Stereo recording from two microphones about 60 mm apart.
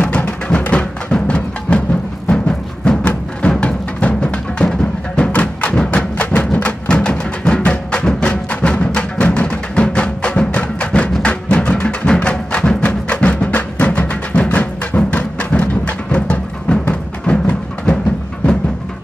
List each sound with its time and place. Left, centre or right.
0.6 s music: centre